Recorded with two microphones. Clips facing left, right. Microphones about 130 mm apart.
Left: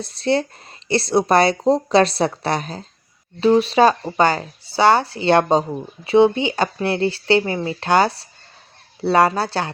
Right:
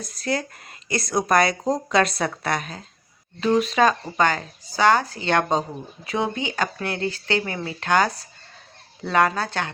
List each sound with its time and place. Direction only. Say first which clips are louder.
0.0 s speech: left 7 dB; 30° left (ahead or behind)